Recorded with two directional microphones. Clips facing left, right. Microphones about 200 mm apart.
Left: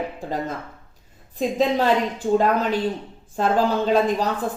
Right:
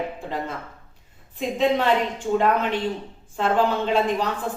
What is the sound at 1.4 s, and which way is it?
A woman's voice, 40° left (ahead or behind).